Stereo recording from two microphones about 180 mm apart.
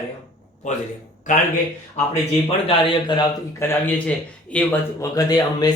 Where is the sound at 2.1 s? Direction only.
35° left (ahead or behind).